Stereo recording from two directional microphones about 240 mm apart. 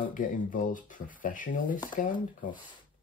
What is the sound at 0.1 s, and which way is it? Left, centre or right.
Speech, left.